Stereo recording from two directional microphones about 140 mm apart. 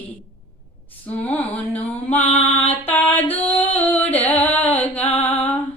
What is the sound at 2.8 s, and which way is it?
Music, 15° left (ahead or behind).